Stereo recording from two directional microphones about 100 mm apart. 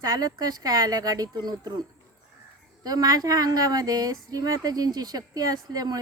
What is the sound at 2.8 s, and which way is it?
Speech, 40° right (ahead or behind).